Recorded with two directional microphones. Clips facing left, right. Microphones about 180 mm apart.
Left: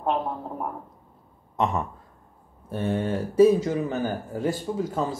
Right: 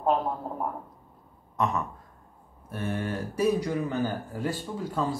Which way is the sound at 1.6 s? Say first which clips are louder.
Left 3 dB; 25° left (ahead or behind).